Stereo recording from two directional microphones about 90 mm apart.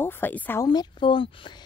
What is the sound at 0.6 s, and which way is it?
Speech, 50° left (ahead or behind).